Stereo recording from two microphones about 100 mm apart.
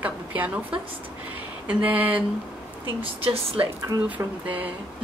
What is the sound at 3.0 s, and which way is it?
Speech, 65° right (ahead or behind).